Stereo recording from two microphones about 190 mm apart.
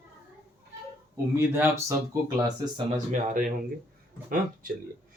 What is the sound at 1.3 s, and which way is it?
Speech, 15° right (ahead or behind).